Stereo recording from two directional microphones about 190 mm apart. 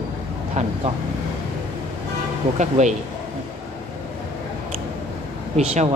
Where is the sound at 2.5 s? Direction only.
40° right (ahead or behind).